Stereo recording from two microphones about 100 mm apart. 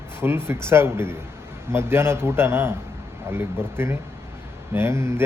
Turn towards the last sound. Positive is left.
turn(degrees=-25)  # may be behind; listen again after turning